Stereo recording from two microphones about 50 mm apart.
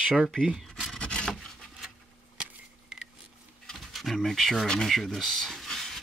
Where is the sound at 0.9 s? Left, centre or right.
Centre.